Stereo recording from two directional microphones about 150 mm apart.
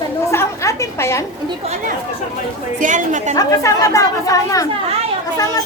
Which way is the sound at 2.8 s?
55° right (ahead or behind).